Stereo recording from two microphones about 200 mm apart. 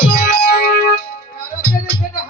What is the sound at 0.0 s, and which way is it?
Music, 50° left (ahead or behind).